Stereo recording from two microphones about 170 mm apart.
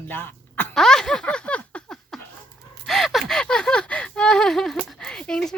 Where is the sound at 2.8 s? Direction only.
Centre (ahead or behind).